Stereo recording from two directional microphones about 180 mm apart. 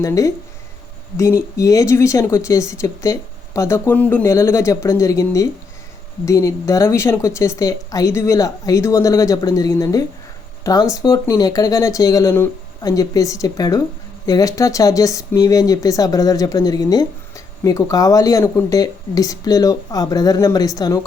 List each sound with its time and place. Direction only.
0.0 s speech: 20° left (ahead or behind)